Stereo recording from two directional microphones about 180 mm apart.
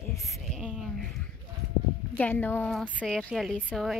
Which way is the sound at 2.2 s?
10° left (ahead or behind).